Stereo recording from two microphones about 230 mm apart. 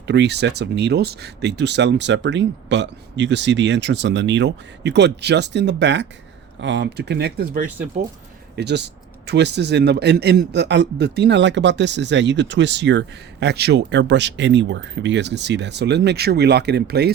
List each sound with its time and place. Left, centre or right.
0.1 s a man's voice: right